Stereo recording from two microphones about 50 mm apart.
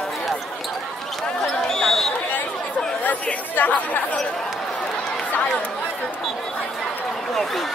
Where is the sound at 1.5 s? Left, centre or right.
Centre.